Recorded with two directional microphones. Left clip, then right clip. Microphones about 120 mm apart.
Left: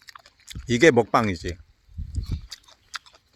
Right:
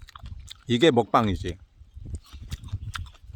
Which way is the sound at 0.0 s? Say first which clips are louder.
Left 2 dB; centre (ahead or behind).